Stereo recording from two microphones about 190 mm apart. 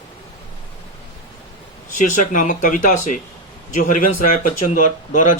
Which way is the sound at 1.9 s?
40° left (ahead or behind).